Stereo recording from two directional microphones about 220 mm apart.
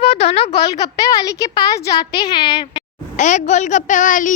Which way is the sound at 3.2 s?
35° left (ahead or behind).